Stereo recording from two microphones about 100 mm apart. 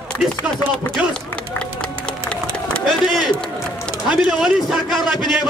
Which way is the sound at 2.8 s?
Centre (ahead or behind).